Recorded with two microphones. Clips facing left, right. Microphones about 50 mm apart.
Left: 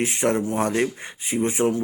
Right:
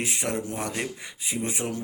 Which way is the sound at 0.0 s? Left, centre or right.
Left.